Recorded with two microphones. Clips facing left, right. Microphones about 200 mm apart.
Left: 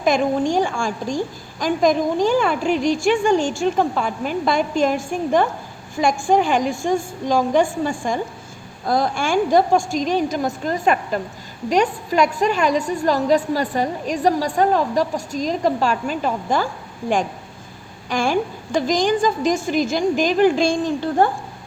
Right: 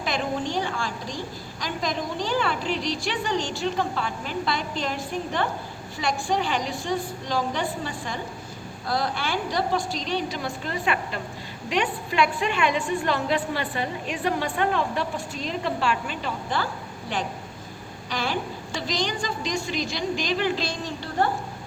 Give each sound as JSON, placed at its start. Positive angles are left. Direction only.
{"t": 0.0, "sound": "a woman's voice", "side_deg": 45}
{"t": 18.1, "sound": "a woman's voice", "side_deg": 50}